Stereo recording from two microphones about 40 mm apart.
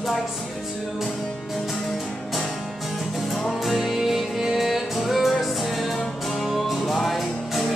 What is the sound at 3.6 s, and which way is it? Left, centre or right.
Music, centre.